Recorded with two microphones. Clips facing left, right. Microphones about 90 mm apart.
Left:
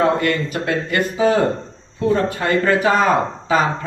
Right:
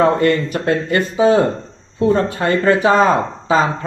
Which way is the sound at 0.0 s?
30° right (ahead or behind).